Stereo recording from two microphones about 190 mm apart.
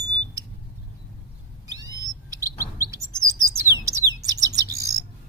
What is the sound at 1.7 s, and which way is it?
Bird, 20° right (ahead or behind).